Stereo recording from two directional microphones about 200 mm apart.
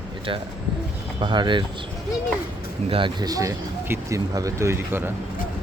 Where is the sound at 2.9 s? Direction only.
25° right (ahead or behind).